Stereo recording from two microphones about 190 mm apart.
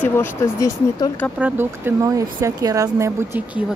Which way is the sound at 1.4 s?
10° right (ahead or behind).